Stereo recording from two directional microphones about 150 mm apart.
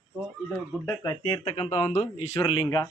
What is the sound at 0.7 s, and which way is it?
Speech, 10° left (ahead or behind).